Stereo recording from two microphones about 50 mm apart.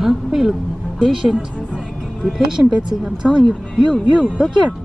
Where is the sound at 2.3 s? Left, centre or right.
Centre.